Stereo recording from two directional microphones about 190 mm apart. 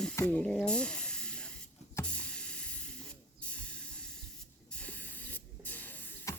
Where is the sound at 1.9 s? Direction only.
5° left (ahead or behind).